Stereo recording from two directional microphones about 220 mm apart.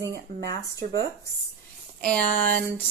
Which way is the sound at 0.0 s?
50° right (ahead or behind).